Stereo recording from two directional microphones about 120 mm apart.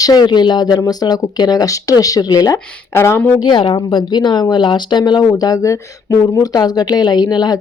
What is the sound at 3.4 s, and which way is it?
Speech, 40° left (ahead or behind).